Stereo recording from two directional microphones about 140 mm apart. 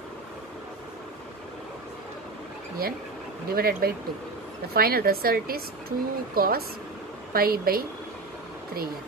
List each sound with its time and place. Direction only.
3.5 s speech: 90° right